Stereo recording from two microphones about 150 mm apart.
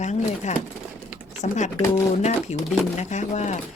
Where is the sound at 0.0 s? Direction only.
50° left (ahead or behind).